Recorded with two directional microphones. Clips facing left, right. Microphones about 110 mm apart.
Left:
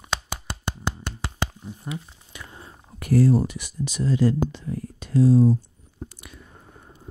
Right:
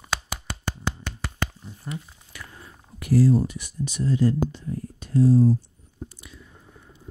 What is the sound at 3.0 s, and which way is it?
Speech, 55° left (ahead or behind).